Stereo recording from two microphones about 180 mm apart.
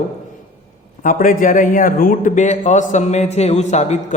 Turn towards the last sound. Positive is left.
turn(degrees=40)  # may be behind; listen again after turning